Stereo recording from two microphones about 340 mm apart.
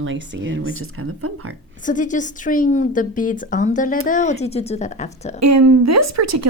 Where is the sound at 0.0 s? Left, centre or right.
Right.